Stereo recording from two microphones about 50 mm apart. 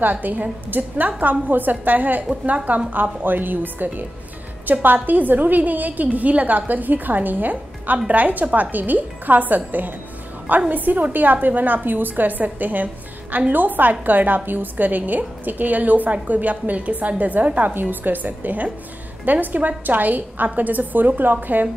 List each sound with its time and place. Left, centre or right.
0.0 s a woman's voice: right